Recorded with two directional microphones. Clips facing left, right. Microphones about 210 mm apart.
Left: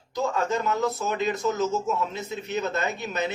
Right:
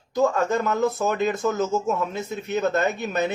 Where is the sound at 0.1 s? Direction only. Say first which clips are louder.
Right 5 dB; 50° right (ahead or behind).